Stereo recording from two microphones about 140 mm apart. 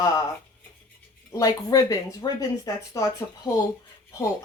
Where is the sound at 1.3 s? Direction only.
25° left (ahead or behind).